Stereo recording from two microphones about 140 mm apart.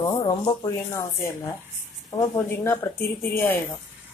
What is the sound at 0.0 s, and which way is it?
A woman's voice, 25° left (ahead or behind).